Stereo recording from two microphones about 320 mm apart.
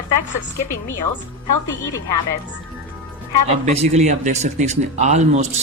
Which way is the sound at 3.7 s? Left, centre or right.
Right.